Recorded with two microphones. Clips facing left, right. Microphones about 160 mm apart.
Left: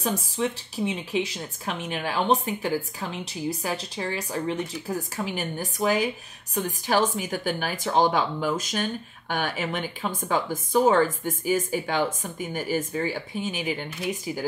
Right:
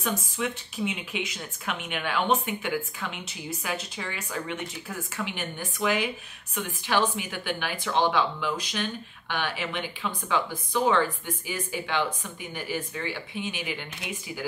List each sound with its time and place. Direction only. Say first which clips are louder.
0.4 s speech: left 3 dB; 35° left (ahead or behind)